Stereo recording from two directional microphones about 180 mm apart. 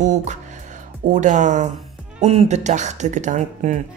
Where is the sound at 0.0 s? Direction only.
40° right (ahead or behind).